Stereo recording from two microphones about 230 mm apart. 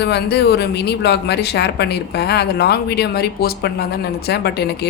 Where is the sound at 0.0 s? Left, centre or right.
Left.